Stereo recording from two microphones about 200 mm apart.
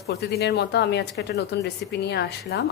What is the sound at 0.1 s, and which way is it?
A woman's voice, 55° left (ahead or behind).